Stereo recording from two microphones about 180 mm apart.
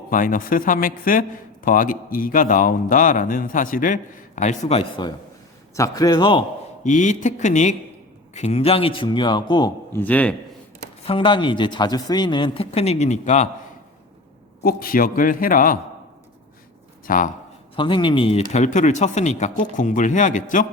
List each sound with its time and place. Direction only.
0.1 s a man's voice: 50° left (ahead or behind); by 5.1 s 30° left (ahead or behind)
5.7 s speech: 15° left (ahead or behind)
6.8 s a man's voice: 45° left (ahead or behind); by 10.0 s 20° left (ahead or behind)
10.0 s speech: 10° left (ahead or behind)
11.0 s speech: 30° left (ahead or behind)
14.6 s a man's voice: 55° left (ahead or behind)
17.1 s a man's voice: 50° left (ahead or behind)
17.7 s speech: 25° left (ahead or behind); by 20.7 s 45° left (ahead or behind)